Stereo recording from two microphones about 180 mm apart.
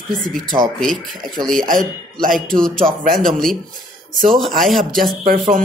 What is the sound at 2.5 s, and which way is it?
Speech, 5° left (ahead or behind).